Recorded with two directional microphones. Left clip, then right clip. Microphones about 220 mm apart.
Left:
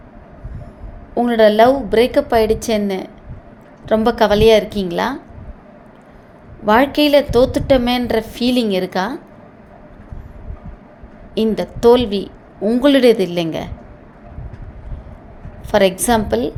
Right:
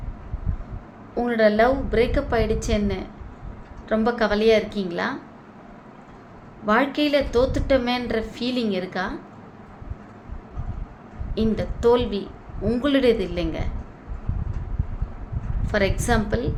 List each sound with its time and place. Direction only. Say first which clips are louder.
1.1 s a woman's voice: left 7 dB; 30° left (ahead or behind)
6.7 s a woman's voice: left 8 dB; 35° left (ahead or behind)
11.3 s a woman's voice: left 7 dB; 35° left (ahead or behind)
15.6 s a woman's voice: left 9 dB; 30° left (ahead or behind)